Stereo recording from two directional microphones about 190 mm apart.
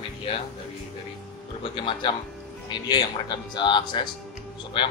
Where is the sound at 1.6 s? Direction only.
25° left (ahead or behind).